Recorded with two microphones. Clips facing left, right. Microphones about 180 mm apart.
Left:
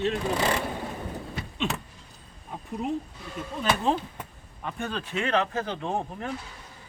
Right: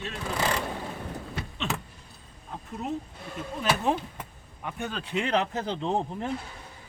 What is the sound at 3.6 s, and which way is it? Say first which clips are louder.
A man's voice: left 1 dB; 10° right (ahead or behind).